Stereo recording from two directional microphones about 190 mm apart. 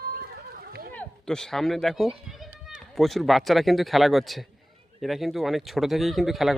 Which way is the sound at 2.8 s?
Centre (ahead or behind).